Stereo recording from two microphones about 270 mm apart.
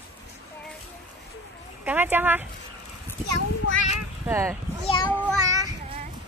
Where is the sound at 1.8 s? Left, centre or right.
Centre.